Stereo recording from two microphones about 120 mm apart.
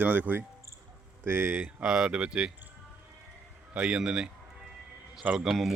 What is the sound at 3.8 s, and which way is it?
A man's voice, 10° right (ahead or behind).